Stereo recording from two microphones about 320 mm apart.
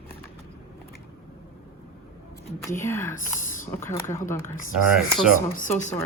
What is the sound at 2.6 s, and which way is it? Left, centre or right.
Speech, centre.